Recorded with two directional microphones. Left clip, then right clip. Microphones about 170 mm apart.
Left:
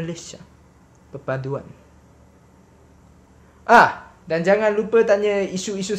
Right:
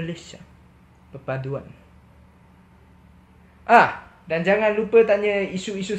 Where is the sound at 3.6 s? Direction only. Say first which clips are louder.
Left 2 dB; 15° left (ahead or behind).